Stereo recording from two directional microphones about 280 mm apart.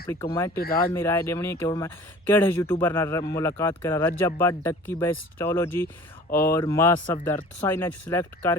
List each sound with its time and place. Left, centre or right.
0.1 s speech: centre
0.5 s speech: left
0.9 s speech: centre